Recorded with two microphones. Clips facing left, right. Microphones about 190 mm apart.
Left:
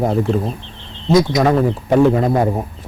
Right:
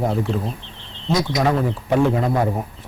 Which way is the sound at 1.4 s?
45° left (ahead or behind).